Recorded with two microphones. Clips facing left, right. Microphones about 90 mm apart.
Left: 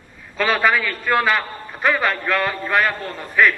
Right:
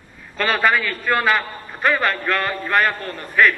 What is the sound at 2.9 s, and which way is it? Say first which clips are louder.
Speech: even; 15° left (ahead or behind).